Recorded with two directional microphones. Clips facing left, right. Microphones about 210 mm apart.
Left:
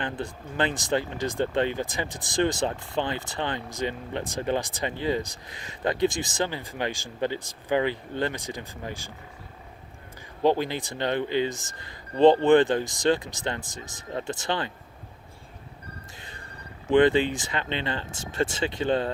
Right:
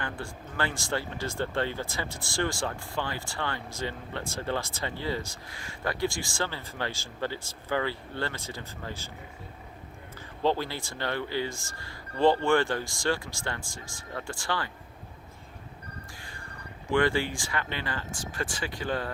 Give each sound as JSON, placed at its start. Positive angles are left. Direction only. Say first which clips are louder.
{"t": 0.0, "sound": "speech", "louder": "left 5 dB", "side_deg": 20}
{"t": 10.4, "sound": "speech", "louder": "left 5 dB", "side_deg": 15}
{"t": 16.1, "sound": "music", "louder": "left 1 dB", "side_deg": 20}
{"t": 16.9, "sound": "speech", "louder": "left 6 dB", "side_deg": 20}